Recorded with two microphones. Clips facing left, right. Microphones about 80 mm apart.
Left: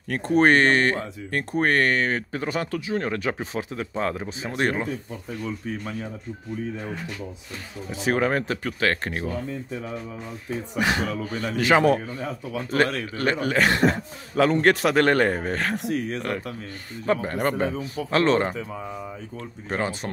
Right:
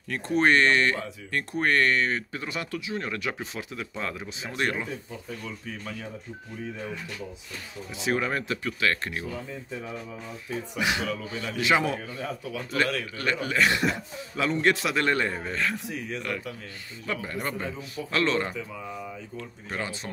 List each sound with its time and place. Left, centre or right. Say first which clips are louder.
0.1 s speech: left 4 dB; left
7.9 s a man's voice: left 5 dB; left
10.8 s a man's voice: left 4 dB; left
12.1 s a man's voice: left 3 dB; left